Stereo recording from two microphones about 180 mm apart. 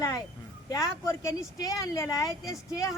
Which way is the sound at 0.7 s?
20° left (ahead or behind).